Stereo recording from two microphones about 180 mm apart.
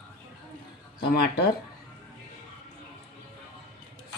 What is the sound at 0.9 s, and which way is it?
Speech, 65° left (ahead or behind).